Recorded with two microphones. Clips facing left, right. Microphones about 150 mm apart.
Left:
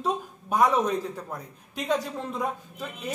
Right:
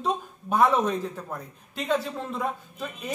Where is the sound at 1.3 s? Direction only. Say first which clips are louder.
Even; 15° left (ahead or behind).